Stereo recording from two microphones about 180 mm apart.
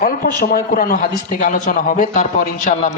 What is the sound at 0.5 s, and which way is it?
Speech, 50° left (ahead or behind).